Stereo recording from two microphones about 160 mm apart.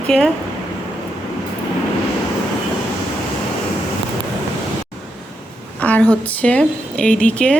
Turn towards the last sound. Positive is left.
turn(degrees=5)  # may be behind; listen again after turning